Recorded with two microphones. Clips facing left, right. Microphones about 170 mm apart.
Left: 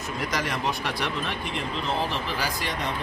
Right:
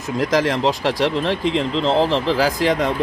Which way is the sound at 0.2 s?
90° right.